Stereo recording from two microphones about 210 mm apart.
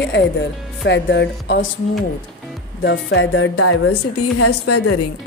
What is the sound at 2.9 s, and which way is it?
A woman's voice, 60° left (ahead or behind).